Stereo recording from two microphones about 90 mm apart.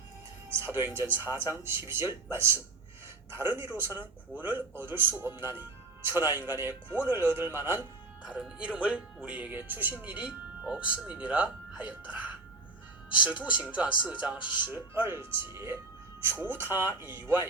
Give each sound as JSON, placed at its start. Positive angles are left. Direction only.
{"t": 0.5, "sound": "a man's voice", "side_deg": -30}
{"t": 8.2, "sound": "a man's voice", "side_deg": -10}